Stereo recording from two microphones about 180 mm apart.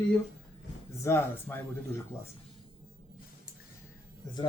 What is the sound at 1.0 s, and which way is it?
Speech, 15° left (ahead or behind).